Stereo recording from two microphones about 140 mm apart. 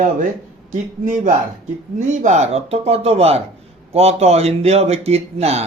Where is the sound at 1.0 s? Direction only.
70° right (ahead or behind).